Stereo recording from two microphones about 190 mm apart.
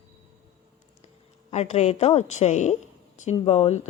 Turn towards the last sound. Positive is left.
turn(degrees=35)  # may be behind; listen again after turning